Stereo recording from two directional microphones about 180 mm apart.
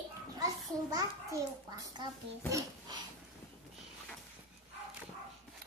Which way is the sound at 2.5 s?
20° right (ahead or behind).